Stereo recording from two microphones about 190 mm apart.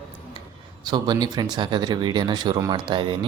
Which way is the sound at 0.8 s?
25° right (ahead or behind).